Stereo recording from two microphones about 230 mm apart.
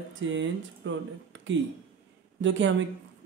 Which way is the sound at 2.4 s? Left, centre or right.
Right.